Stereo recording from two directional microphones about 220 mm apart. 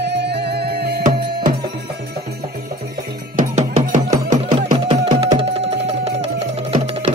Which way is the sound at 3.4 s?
35° right (ahead or behind).